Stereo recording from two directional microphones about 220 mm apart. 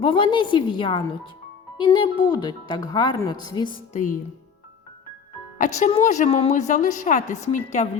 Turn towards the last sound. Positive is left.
turn(degrees=35)  # may be behind; listen again after turning